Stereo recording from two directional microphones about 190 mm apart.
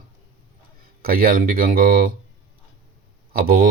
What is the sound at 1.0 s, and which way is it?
Speech, 50° right (ahead or behind).